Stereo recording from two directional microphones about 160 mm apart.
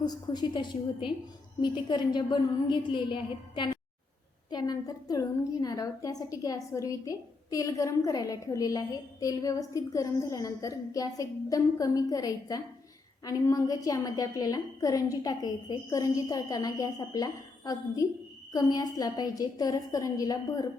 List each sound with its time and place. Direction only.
0.0 s a woman's voice: 25° left (ahead or behind)